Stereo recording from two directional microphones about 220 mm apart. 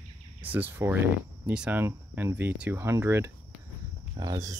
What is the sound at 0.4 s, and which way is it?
Speech, 10° right (ahead or behind).